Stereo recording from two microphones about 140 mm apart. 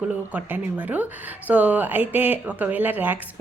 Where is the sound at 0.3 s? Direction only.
10° right (ahead or behind).